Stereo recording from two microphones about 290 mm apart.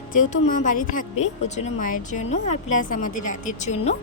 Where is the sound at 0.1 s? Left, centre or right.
Left.